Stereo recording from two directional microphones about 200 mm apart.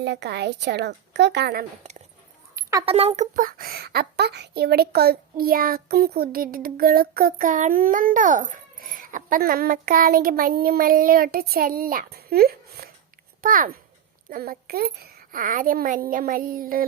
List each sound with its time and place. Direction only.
0.0 s a woman's voice: 60° right (ahead or behind)
2.6 s a sound: 15° right (ahead or behind)
2.8 s a child's voice: 30° right (ahead or behind); by 16.8 s 45° right (ahead or behind)